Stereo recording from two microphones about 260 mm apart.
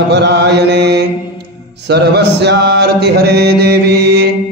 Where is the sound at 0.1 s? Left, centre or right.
Right.